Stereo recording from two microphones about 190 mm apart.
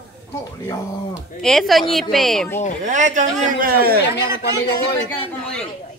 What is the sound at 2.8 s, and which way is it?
A man's voice, 40° right (ahead or behind).